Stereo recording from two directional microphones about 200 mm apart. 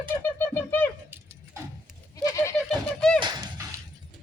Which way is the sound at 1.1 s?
10° right (ahead or behind).